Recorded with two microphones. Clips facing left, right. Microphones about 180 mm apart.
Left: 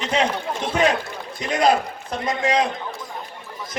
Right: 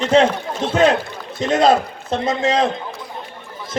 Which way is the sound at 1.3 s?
25° right (ahead or behind).